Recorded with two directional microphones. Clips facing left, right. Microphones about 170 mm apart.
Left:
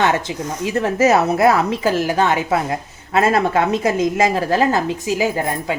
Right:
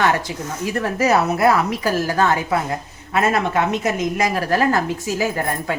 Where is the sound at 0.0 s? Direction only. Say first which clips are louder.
Left 1 dB; 20° left (ahead or behind).